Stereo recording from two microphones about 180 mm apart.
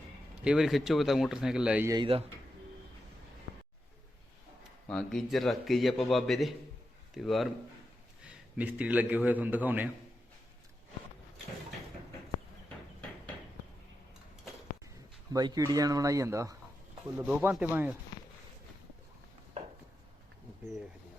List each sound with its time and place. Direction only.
0.4 s a man's voice: 5° right (ahead or behind)
1.9 s speech: 25° right (ahead or behind)
4.9 s a man's voice: centre (ahead or behind)
12.6 s a sound: 10° left (ahead or behind)
15.3 s speech: 20° right (ahead or behind)
17.2 s speech: 5° right (ahead or behind)